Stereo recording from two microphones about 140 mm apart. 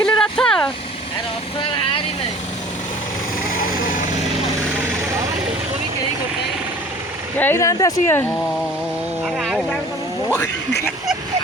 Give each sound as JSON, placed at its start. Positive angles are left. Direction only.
{"t": 0.0, "sound": "vehicle", "side_deg": 5}
{"t": 7.3, "sound": "speech", "side_deg": 15}
{"t": 9.2, "sound": "speech", "side_deg": 0}
{"t": 10.2, "sound": "speech", "side_deg": 15}